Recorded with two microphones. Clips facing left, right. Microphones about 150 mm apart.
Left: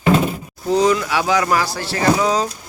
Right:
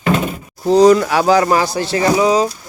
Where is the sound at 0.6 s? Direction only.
35° right (ahead or behind); by 2.4 s 10° right (ahead or behind).